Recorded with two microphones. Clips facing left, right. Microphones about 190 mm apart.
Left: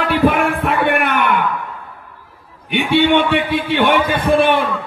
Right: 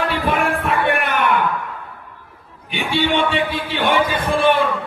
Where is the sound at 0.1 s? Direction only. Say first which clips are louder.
Left 6 dB; 60° left (ahead or behind).